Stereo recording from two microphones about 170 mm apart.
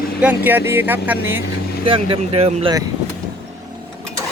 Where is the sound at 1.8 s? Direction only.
30° right (ahead or behind).